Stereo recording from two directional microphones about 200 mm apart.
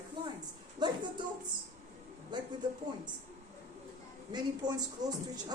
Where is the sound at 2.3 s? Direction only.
20° right (ahead or behind).